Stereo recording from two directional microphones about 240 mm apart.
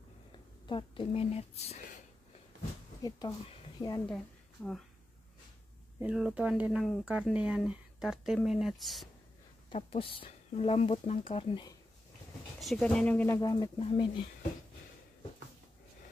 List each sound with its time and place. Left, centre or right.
0.7 s speech: left
3.0 s speech: centre
5.9 s speech: centre
9.7 s speech: left
12.5 s speech: centre